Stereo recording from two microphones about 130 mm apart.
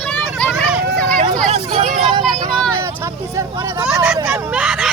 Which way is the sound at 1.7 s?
50° right (ahead or behind).